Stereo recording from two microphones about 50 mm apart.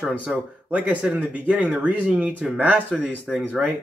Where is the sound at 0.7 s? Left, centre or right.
Right.